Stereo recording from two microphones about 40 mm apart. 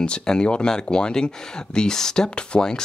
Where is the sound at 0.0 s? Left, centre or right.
Left.